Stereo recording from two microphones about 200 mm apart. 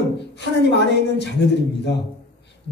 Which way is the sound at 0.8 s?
60° left (ahead or behind).